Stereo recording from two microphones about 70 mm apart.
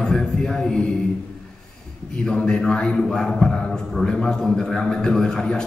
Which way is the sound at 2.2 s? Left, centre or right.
Centre.